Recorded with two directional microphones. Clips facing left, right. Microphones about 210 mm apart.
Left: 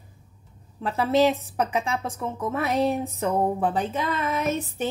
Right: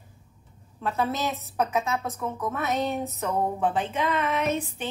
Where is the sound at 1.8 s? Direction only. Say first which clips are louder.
Left 1 dB; 30° left (ahead or behind).